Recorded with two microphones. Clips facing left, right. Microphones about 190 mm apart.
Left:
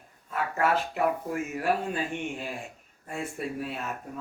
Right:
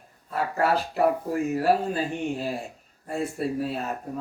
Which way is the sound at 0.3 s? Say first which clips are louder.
Right 3 dB; 35° right (ahead or behind).